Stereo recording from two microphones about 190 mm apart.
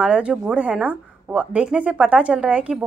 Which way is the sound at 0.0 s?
5° right (ahead or behind).